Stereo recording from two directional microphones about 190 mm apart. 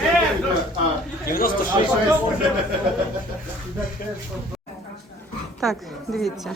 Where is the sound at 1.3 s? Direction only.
50° left (ahead or behind).